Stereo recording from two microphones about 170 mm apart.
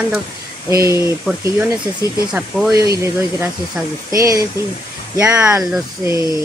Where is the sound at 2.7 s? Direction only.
20° right (ahead or behind).